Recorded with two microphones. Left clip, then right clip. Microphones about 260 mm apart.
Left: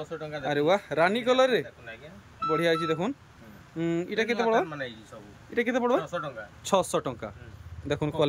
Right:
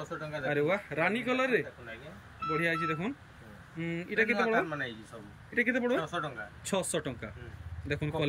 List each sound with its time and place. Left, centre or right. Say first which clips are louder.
0.5 s speech: left 6 dB; centre